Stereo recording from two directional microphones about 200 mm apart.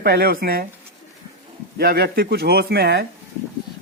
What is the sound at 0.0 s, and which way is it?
Speech, 50° right (ahead or behind).